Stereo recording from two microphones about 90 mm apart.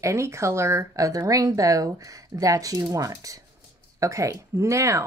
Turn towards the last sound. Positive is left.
turn(degrees=-35)  # may be behind; listen again after turning